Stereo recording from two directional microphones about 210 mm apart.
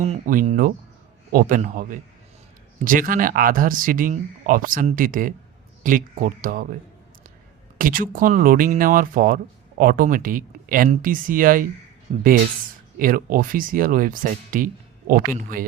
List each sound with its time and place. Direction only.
0.0 s speech: 35° right (ahead or behind)
7.8 s speech: 40° right (ahead or behind)
13.0 s speech: 40° right (ahead or behind)